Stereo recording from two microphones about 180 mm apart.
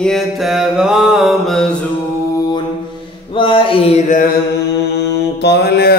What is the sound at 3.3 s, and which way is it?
Music, 30° left (ahead or behind).